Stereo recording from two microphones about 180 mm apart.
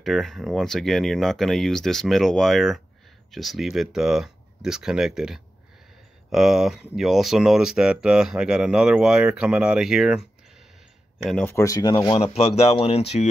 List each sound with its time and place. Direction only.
0.0 s speech: centre (ahead or behind)
11.2 s speech: 5° left (ahead or behind)
11.5 s speech: 20° left (ahead or behind); by 13.3 s 35° left (ahead or behind)